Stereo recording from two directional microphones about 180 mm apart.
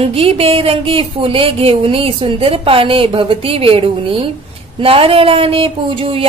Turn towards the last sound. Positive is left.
turn(degrees=-30)  # may be behind; listen again after turning